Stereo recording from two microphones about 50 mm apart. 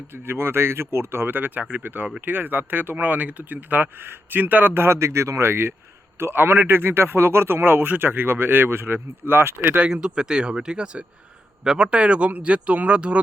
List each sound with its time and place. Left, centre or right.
0.1 s speech: right
4.9 s speech: right
9.8 s speech: centre
11.9 s speech: right